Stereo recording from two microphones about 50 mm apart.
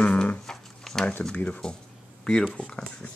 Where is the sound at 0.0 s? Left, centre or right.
Left.